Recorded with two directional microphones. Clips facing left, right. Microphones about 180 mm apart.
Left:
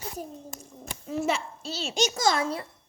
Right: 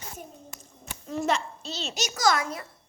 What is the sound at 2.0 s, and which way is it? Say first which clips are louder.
Speech: left 1 dB; 25° left (ahead or behind).